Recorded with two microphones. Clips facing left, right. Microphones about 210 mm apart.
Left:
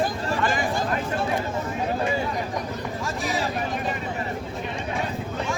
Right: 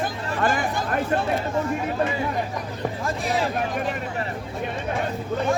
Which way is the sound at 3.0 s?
55° right (ahead or behind).